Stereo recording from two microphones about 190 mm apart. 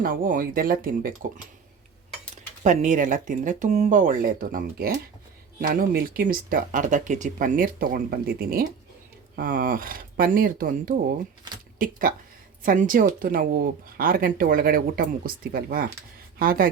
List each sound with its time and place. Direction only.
0.0 s speech: 45° right (ahead or behind)
2.3 s speech: 40° right (ahead or behind)